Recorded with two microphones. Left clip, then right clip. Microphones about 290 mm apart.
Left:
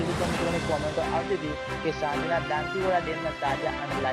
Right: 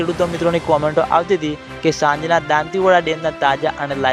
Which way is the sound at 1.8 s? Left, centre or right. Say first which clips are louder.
Right 13 dB; right.